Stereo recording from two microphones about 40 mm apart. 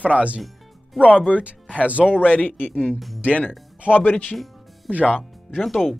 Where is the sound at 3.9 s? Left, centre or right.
Left.